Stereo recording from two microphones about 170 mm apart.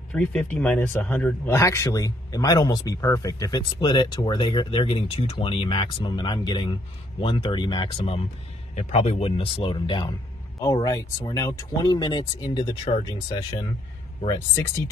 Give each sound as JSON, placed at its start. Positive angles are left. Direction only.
{"t": 0.1, "sound": "speech", "side_deg": 5}